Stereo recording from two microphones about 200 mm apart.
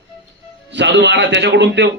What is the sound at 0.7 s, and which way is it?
A man's voice, 60° right (ahead or behind).